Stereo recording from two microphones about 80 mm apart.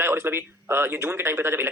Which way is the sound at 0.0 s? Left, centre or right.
Right.